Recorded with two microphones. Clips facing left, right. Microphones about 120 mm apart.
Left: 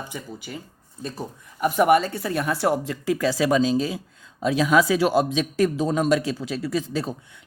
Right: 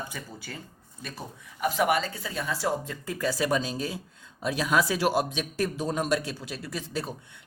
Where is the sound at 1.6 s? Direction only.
50° left (ahead or behind); by 7.0 s 90° left.